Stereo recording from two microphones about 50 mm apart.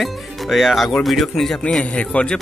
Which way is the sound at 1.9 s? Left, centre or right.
Left.